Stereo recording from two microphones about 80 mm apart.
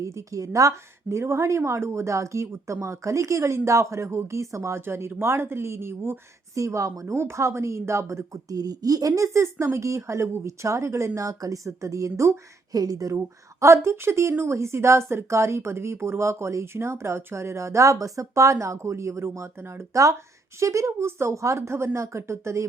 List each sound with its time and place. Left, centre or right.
0.0 s a woman's voice: right
7.1 s a woman's voice: right
12.7 s speech: right
13.1 s a woman's voice: right